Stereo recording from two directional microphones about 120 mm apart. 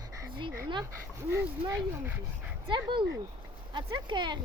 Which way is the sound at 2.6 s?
45° right (ahead or behind).